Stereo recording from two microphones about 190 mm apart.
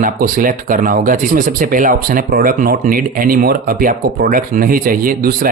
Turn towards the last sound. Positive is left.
turn(degrees=-50)  # may be behind; listen again after turning